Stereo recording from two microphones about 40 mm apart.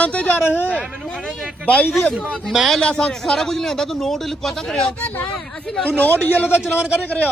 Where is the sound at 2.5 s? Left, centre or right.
Centre.